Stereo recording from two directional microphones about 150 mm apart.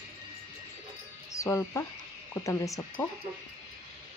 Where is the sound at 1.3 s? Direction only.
20° left (ahead or behind).